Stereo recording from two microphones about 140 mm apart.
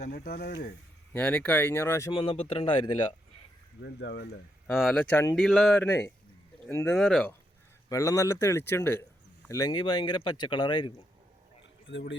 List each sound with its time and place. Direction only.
0.1 s speech: 90° left
1.1 s speech: 10° left (ahead or behind)
2.1 s speech: 40° left (ahead or behind)
4.7 s speech: centre (ahead or behind)
4.9 s speech: 15° left (ahead or behind)
5.3 s speech: centre (ahead or behind)
6.7 s speech: 15° left (ahead or behind)
6.9 s speech: 5° left (ahead or behind)
7.9 s speech: 20° left (ahead or behind)
9.5 s speech: 25° left (ahead or behind)